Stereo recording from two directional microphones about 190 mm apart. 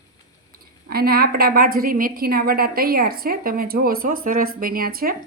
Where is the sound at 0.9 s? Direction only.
55° right (ahead or behind).